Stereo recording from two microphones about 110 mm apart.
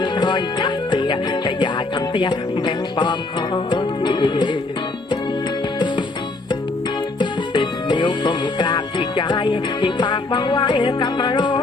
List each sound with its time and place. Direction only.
0.0 s music: 45° left (ahead or behind)
2.1 s speech: 45° left (ahead or behind)
7.2 s music: 45° left (ahead or behind)